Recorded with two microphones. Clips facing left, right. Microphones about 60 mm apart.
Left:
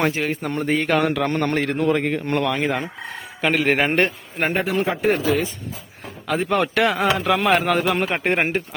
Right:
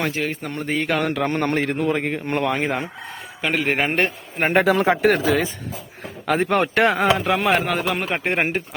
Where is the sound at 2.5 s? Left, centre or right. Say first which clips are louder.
Even; right.